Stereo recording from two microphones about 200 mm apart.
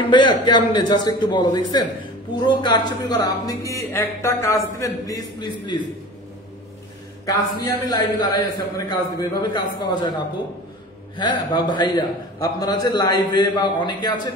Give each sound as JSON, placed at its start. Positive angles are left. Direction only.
{"t": 0.1, "sound": "a man's voice", "side_deg": 20}
{"t": 7.2, "sound": "a man's voice", "side_deg": 20}